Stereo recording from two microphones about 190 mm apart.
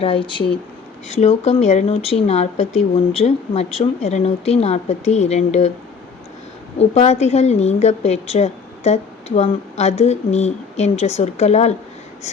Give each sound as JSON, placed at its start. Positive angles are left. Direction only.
{"t": 0.0, "sound": "a woman's voice", "side_deg": 30}
{"t": 6.7, "sound": "a woman's voice", "side_deg": 35}